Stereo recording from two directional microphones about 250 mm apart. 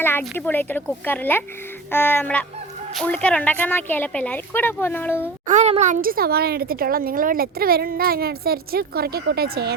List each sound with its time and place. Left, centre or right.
0.0 s speech: centre
5.5 s speech: right